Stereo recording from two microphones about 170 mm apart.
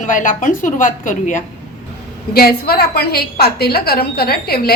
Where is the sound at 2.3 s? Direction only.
65° left (ahead or behind).